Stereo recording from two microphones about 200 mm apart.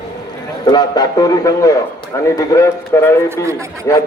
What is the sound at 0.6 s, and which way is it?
A man's voice, 20° left (ahead or behind).